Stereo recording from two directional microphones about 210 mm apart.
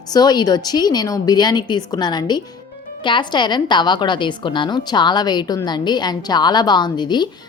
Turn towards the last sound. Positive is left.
turn(degrees=20)  # may be behind; listen again after turning